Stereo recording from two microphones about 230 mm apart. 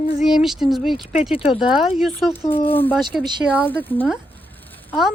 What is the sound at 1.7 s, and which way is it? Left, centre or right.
Speech, centre.